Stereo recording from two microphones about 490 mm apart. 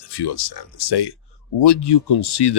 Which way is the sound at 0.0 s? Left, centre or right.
Left.